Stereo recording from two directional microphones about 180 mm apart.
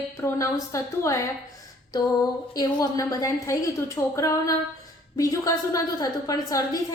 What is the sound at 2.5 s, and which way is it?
A woman's voice, 20° left (ahead or behind).